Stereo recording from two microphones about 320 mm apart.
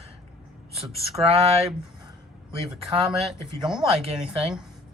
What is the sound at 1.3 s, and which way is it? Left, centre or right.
Speech, centre.